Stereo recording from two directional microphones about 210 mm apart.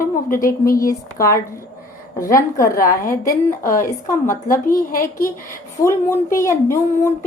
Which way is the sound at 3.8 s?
15° left (ahead or behind).